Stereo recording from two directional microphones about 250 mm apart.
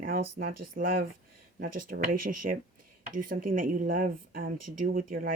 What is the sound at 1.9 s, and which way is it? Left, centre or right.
Speech, right.